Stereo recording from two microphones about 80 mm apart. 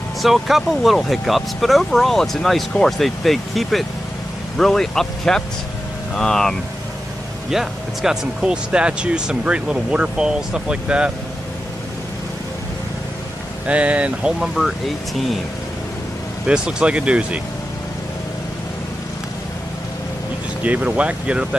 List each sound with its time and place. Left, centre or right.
0.2 s speech: centre
7.5 s speech: centre
13.7 s speech: centre
16.4 s speech: centre
20.6 s speech: centre